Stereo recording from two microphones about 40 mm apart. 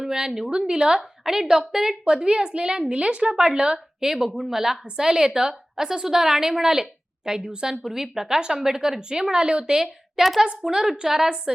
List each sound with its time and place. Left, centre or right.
0.0 s a woman's voice: centre
4.1 s a woman's voice: centre